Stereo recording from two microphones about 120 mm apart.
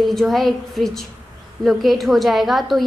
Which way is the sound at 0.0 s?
Centre (ahead or behind).